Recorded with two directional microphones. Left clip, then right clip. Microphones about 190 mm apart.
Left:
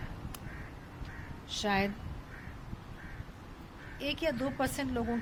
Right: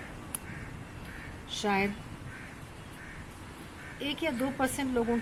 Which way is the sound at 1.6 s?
15° left (ahead or behind).